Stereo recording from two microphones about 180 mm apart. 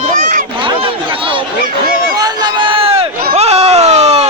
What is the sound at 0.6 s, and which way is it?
Speech, 30° right (ahead or behind).